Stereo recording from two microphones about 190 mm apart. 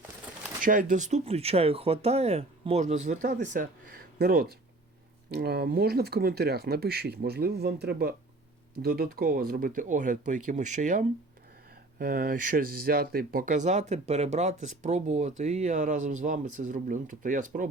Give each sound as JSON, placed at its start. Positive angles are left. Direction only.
{"t": 0.6, "sound": "speech", "side_deg": -45}
{"t": 11.9, "sound": "speech", "side_deg": -50}